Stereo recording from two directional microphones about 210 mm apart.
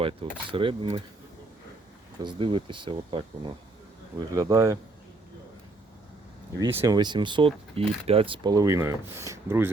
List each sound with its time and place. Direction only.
0.0 s speech: 25° right (ahead or behind)
2.2 s speech: 25° right (ahead or behind)
6.6 s speech: 15° right (ahead or behind)